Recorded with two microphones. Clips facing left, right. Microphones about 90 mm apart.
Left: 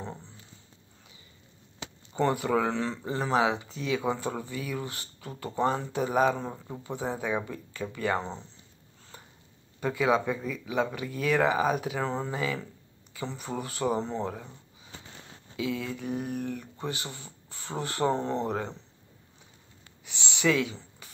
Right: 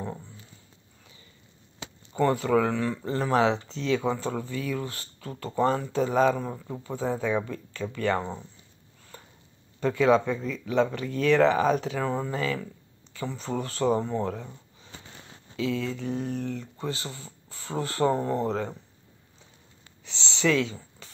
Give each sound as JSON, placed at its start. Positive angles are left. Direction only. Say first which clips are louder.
{"t": 2.1, "sound": "speech", "louder": "right 3 dB", "side_deg": 20}
{"t": 8.2, "sound": "speech", "louder": "right 3 dB", "side_deg": -10}
{"t": 9.1, "sound": "sniff", "louder": "right 2 dB", "side_deg": 15}
{"t": 9.8, "sound": "speech", "louder": "right 4 dB", "side_deg": 15}
{"t": 15.5, "sound": "speech", "louder": "right 3 dB", "side_deg": 15}
{"t": 20.1, "sound": "speech", "louder": "right 1 dB", "side_deg": 15}
{"t": 21.0, "sound": "a sound", "louder": "right 2 dB", "side_deg": 15}